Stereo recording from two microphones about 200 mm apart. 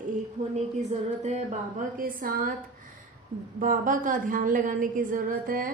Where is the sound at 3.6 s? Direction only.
40° right (ahead or behind).